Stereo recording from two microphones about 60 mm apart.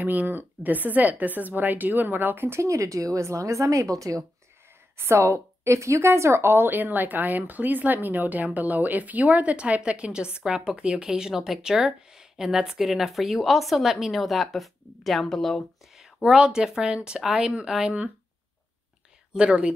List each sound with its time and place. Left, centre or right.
0.0 s a woman's voice: right
4.9 s a woman's voice: right; by 16.1 s centre
16.2 s a woman's voice: centre
19.3 s a woman's voice: centre